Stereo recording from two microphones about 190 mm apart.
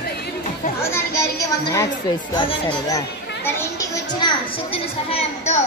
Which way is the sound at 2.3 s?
25° left (ahead or behind).